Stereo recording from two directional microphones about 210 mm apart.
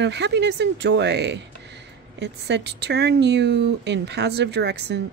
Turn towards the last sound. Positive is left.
turn(degrees=-55)  # may be behind; listen again after turning